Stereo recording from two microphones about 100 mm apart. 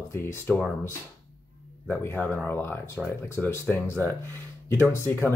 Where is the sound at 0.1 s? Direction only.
25° left (ahead or behind).